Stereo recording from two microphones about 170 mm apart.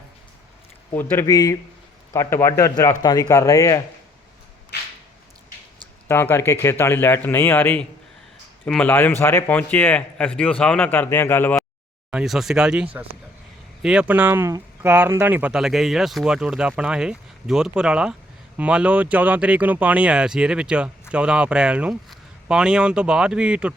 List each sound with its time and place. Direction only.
1.1 s speech: 20° left (ahead or behind)
6.1 s speech: 15° left (ahead or behind)
12.1 s speech: centre (ahead or behind)